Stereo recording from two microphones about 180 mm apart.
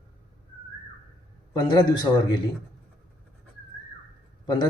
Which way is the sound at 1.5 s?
20° left (ahead or behind).